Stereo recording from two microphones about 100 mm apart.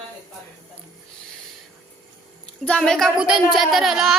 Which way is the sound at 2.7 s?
5° left (ahead or behind).